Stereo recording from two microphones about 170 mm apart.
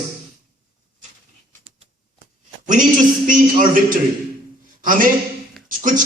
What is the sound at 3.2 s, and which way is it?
A man's voice, 55° right (ahead or behind).